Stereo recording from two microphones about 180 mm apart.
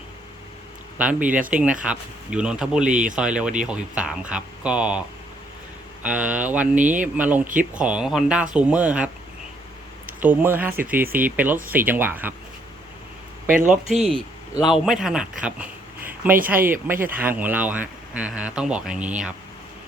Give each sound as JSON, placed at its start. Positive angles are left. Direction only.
{"t": 0.9, "sound": "speech", "side_deg": -5}
{"t": 6.7, "sound": "speech", "side_deg": -45}
{"t": 7.2, "sound": "speech", "side_deg": -10}
{"t": 7.4, "sound": "speech", "side_deg": -45}
{"t": 7.7, "sound": "speech", "side_deg": -5}
{"t": 10.2, "sound": "speech", "side_deg": -10}
{"t": 13.5, "sound": "speech", "side_deg": -45}
{"t": 13.9, "sound": "speech", "side_deg": -35}
{"t": 14.6, "sound": "speech", "side_deg": -5}
{"t": 16.0, "sound": "a sound", "side_deg": -10}
{"t": 16.5, "sound": "speech", "side_deg": -10}